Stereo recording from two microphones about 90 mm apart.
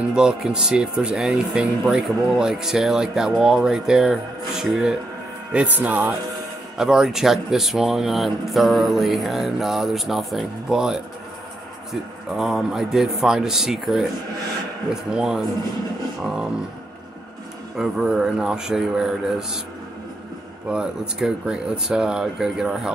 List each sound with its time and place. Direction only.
0.1 s speech: 10° right (ahead or behind)
5.8 s speech: 15° right (ahead or behind)
6.8 s speech: 5° right (ahead or behind)
15.1 s speech: 5° right (ahead or behind)
17.7 s speech: 5° right (ahead or behind)
20.7 s speech: 10° right (ahead or behind)